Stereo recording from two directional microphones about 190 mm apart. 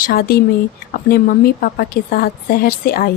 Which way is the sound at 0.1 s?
50° left (ahead or behind).